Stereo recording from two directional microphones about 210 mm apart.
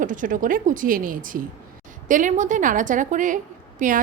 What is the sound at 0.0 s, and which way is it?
A woman's voice, 40° right (ahead or behind).